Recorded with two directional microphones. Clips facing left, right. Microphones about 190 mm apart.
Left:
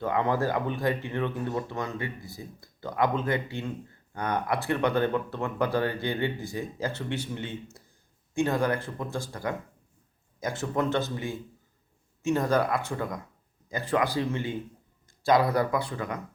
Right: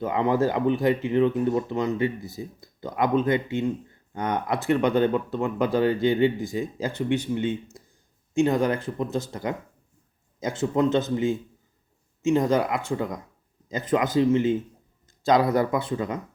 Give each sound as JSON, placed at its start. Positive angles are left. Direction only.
{"t": 0.0, "sound": "speech", "side_deg": -20}